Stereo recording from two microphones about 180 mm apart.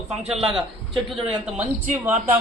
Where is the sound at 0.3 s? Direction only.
Centre (ahead or behind).